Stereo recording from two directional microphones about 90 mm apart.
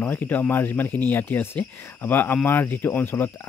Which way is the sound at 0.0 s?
20° left (ahead or behind).